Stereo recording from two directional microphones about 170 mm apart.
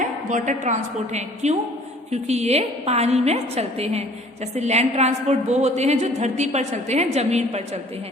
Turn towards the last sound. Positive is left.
turn(degrees=-40)  # may be behind; listen again after turning